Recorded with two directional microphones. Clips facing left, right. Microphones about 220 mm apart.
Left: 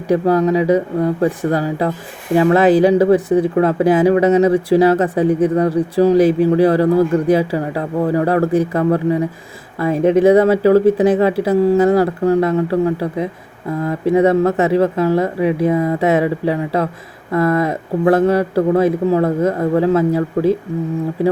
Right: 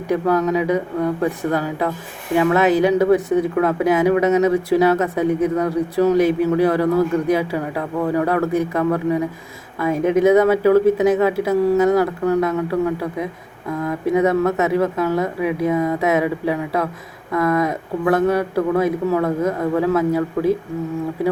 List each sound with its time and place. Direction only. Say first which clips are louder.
0.1 s speech: left 4 dB; 30° left (ahead or behind)